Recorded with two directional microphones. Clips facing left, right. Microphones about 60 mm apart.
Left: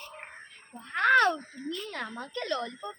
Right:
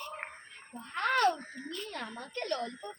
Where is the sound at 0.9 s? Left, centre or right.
Left.